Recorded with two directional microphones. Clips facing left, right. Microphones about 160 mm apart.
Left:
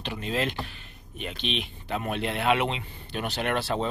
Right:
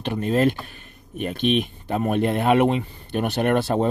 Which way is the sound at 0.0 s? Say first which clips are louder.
Right 9 dB; 50° right (ahead or behind).